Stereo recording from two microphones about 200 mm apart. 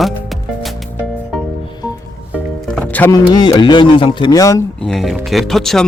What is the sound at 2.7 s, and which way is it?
Speech, 10° left (ahead or behind).